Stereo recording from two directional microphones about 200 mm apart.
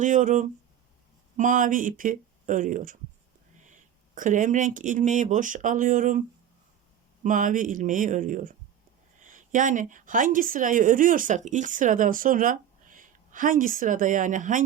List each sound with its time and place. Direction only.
0.0 s a woman's voice: 40° right (ahead or behind)